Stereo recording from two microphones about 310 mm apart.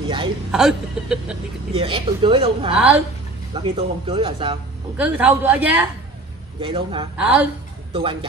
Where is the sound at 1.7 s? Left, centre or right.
Centre.